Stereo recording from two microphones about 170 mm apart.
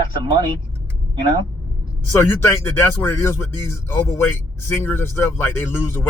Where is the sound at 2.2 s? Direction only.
15° left (ahead or behind).